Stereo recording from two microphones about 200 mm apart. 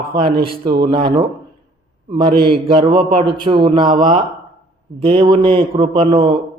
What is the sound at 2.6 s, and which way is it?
A man's voice, 25° right (ahead or behind).